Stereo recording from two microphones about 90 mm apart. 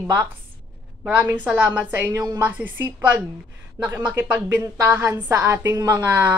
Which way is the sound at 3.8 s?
40° right (ahead or behind).